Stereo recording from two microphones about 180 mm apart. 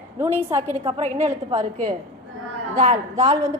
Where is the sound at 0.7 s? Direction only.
35° right (ahead or behind).